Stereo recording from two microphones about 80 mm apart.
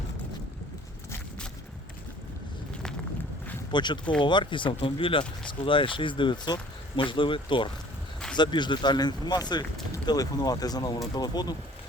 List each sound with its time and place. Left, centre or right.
3.7 s speech: left
4.2 s speech: left
8.4 s speech: left